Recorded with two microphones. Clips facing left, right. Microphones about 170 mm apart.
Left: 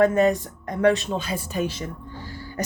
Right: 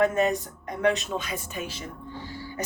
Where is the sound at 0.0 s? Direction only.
35° left (ahead or behind).